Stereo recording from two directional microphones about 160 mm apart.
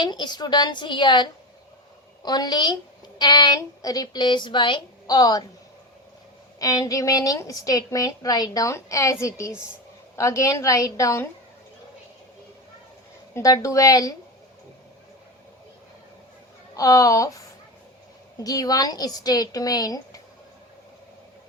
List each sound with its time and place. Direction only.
0.0 s a woman's voice: 25° left (ahead or behind)
6.6 s a woman's voice: 20° left (ahead or behind)
13.3 s a woman's voice: 20° left (ahead or behind)
16.7 s a woman's voice: 20° left (ahead or behind)
18.4 s a woman's voice: 25° left (ahead or behind)